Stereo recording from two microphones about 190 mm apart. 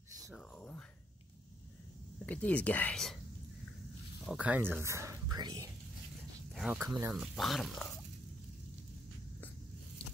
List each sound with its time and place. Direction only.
0.3 s a sound: 5° left (ahead or behind)
2.2 s speech: 10° left (ahead or behind)
4.3 s speech: 5° right (ahead or behind)
6.5 s a sound: 5° right (ahead or behind)
6.8 s speech: 15° right (ahead or behind)
7.2 s speech: centre (ahead or behind)